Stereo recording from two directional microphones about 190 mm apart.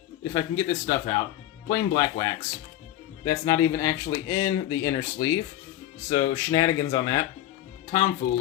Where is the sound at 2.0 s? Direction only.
20° left (ahead or behind).